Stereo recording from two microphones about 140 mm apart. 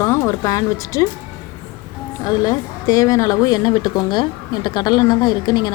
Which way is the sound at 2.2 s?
25° left (ahead or behind).